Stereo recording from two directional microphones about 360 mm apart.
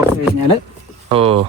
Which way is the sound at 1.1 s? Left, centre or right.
Centre.